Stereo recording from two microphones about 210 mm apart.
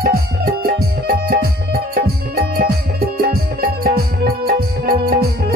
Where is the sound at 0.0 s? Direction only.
45° right (ahead or behind).